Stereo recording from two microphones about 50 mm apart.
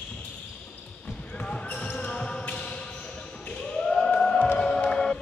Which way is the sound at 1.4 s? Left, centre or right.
Left.